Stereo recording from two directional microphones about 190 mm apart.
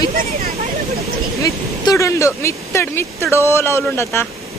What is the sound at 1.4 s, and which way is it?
Speech, 15° left (ahead or behind).